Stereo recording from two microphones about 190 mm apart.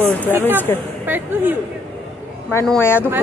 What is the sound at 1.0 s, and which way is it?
Speech, 10° right (ahead or behind).